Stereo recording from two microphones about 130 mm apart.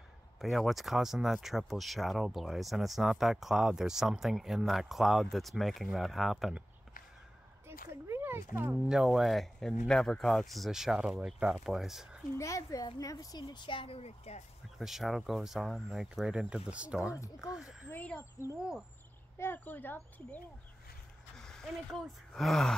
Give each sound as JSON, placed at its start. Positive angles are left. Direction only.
{"t": 0.4, "sound": "speech", "side_deg": 0}
{"t": 8.1, "sound": "a sound", "side_deg": -20}
{"t": 8.8, "sound": "speech", "side_deg": -5}
{"t": 12.4, "sound": "speech", "side_deg": 25}
{"t": 14.8, "sound": "speech", "side_deg": 0}
{"t": 17.1, "sound": "speech", "side_deg": 25}
{"t": 17.8, "sound": "speech", "side_deg": 10}
{"t": 19.3, "sound": "speech", "side_deg": 15}
{"t": 21.4, "sound": "speech", "side_deg": 5}